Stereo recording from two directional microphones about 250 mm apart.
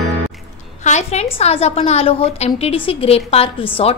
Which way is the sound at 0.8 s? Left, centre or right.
Left.